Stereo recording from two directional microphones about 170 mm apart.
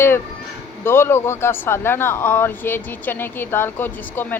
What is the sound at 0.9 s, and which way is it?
A woman's voice, 15° left (ahead or behind).